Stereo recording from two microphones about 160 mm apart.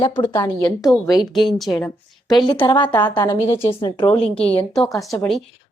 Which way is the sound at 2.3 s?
30° left (ahead or behind).